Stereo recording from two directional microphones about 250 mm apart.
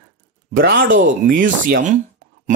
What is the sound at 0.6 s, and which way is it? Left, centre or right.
Speech, right.